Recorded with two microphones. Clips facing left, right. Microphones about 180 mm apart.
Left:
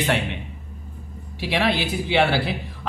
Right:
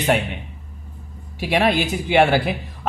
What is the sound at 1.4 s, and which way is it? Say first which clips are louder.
Speech: right 4 dB; 45° right (ahead or behind).